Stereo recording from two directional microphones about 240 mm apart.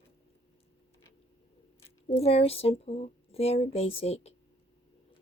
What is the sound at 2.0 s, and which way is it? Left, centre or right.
Speech, left.